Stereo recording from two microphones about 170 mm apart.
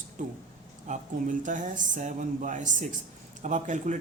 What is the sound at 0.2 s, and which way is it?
Speech, 50° right (ahead or behind).